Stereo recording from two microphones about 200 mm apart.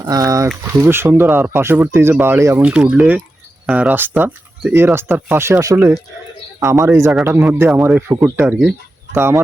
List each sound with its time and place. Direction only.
0.0 s speech: 15° right (ahead or behind)